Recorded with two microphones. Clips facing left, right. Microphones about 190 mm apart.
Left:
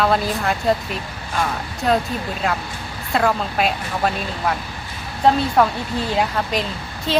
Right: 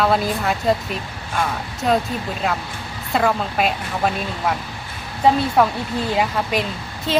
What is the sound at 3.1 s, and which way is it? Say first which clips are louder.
Speech: even; centre (ahead or behind).